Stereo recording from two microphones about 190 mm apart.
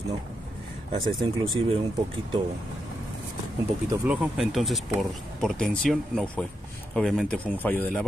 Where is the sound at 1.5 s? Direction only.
30° right (ahead or behind).